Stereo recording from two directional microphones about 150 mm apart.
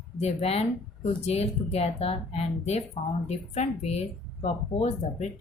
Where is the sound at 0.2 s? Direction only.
45° left (ahead or behind).